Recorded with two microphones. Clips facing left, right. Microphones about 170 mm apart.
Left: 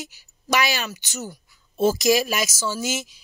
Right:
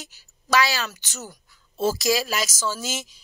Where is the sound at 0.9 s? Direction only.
10° left (ahead or behind).